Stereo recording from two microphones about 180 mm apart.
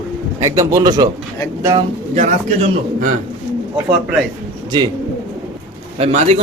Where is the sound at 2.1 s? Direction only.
40° right (ahead or behind).